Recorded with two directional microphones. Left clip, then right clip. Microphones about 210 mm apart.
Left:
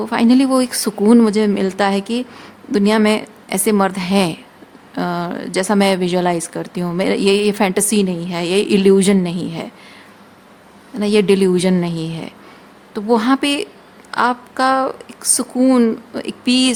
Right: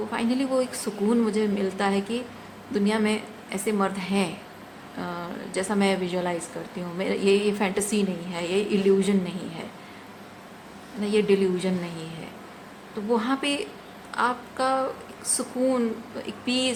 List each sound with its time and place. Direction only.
0.1 s a woman's voice: 55° left (ahead or behind)
11.0 s a woman's voice: 60° left (ahead or behind)